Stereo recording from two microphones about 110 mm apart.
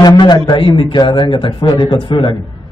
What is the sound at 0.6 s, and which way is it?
A man's voice, 50° left (ahead or behind).